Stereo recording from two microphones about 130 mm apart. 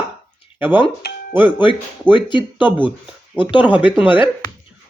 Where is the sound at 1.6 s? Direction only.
35° left (ahead or behind).